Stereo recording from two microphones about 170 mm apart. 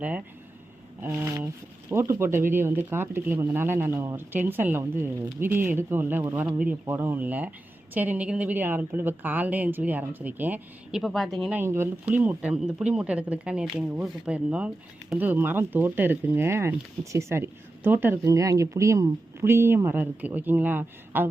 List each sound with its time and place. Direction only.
1.0 s speech: 20° right (ahead or behind)
11.0 s speech: centre (ahead or behind)
11.6 s speech: 15° right (ahead or behind)